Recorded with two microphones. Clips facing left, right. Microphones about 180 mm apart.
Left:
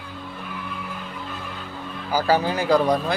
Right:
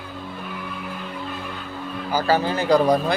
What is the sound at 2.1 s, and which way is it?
Speech, 10° left (ahead or behind).